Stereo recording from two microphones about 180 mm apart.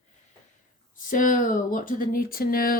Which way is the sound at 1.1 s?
50° left (ahead or behind).